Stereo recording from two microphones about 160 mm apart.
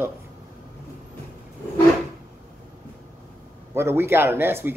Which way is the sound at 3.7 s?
15° right (ahead or behind).